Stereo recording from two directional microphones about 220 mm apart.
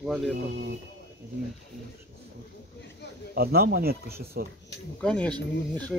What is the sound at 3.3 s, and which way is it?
Speech, 45° right (ahead or behind).